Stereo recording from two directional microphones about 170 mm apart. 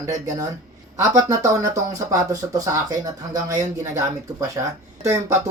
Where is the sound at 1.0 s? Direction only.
20° right (ahead or behind).